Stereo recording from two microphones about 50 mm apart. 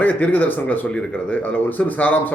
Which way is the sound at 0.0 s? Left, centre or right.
Left.